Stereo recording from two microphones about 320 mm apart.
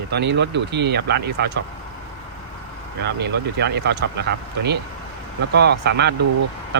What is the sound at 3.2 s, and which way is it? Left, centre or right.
Speech, right.